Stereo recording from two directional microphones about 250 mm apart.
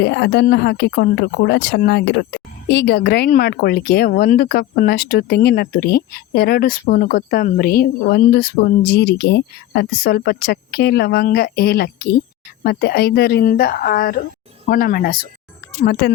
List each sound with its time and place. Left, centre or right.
0.0 s speech: left